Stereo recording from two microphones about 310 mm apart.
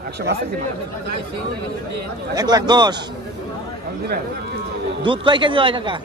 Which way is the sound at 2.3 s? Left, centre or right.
Centre.